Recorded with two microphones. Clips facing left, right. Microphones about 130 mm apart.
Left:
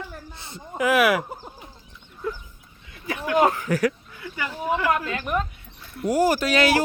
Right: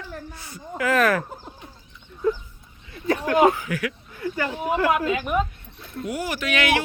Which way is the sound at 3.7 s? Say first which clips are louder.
Left 6 dB; 40° left (ahead or behind).